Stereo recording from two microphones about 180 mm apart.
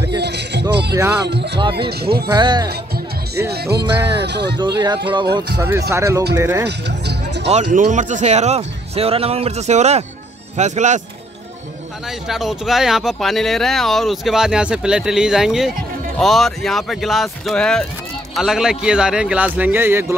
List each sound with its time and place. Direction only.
0.2 s music: 70° right (ahead or behind)
0.9 s speech: 15° right (ahead or behind)
1.3 s music: 70° right (ahead or behind)
1.8 s speech: 60° right (ahead or behind)
2.3 s speech: 25° right (ahead or behind)
3.5 s speech: 65° right (ahead or behind)
4.6 s speech: 25° right (ahead or behind)
5.6 s speech: 15° right (ahead or behind)
7.4 s speech: 40° right (ahead or behind)
12.3 s speech: centre (ahead or behind)